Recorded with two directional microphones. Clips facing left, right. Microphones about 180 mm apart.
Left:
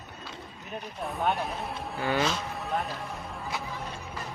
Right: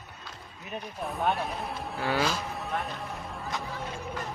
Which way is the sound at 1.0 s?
Centre (ahead or behind).